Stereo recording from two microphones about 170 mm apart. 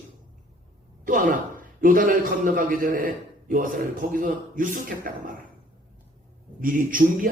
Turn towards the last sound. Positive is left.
turn(degrees=-55)  # may be behind; listen again after turning